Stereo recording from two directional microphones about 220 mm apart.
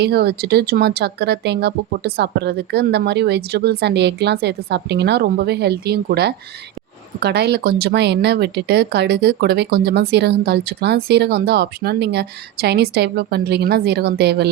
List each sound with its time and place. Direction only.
0.0 s speech: 45° right (ahead or behind)